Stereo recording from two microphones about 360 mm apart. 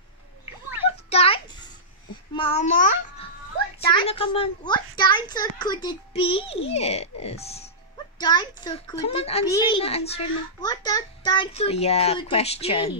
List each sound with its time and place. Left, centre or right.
0.8 s a sound: centre
2.3 s a child's voice: centre
3.9 s a child's voice: centre